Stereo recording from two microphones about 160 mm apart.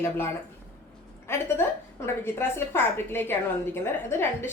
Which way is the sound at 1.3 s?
15° left (ahead or behind).